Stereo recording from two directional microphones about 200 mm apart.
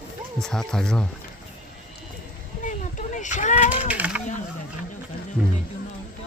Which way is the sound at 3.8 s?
5° right (ahead or behind).